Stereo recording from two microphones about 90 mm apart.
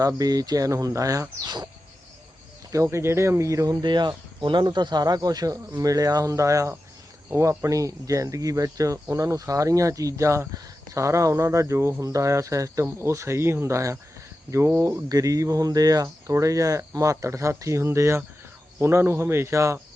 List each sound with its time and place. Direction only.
0.0 s speech: 45° right (ahead or behind)
2.7 s speech: 35° right (ahead or behind)